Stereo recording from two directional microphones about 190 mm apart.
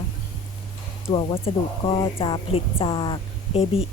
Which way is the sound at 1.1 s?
30° left (ahead or behind).